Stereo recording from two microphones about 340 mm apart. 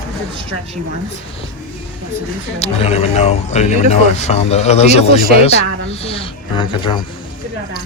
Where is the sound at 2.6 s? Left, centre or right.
Centre.